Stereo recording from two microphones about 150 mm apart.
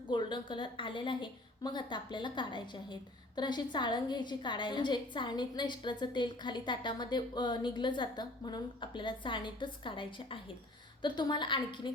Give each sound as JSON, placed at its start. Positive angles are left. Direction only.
{"t": 0.1, "sound": "a woman's voice", "side_deg": 30}